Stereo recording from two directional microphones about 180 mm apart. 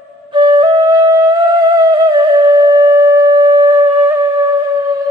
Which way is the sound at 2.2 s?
20° right (ahead or behind).